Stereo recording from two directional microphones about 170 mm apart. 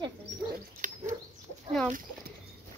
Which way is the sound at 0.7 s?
50° right (ahead or behind).